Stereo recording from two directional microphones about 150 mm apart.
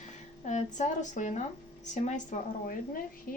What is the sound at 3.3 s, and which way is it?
Speech, 75° left (ahead or behind).